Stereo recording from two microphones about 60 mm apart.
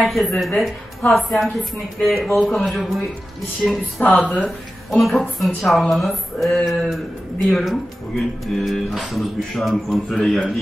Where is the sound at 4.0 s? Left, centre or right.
Left.